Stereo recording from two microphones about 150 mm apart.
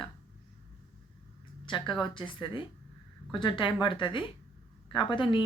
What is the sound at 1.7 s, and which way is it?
Speech, 35° left (ahead or behind).